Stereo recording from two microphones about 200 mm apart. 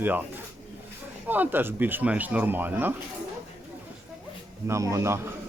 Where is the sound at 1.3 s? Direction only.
10° right (ahead or behind).